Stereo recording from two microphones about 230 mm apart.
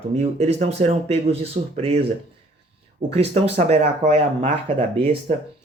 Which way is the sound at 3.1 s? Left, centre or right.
Right.